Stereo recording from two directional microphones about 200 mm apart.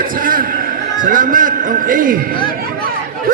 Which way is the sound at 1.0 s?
45° right (ahead or behind).